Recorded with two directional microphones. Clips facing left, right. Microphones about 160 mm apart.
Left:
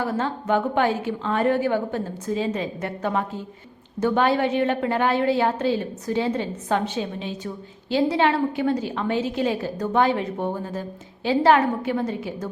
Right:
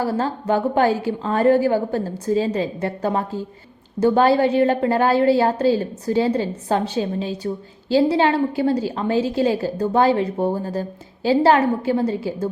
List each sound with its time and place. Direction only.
0.0 s a woman's voice: 35° right (ahead or behind)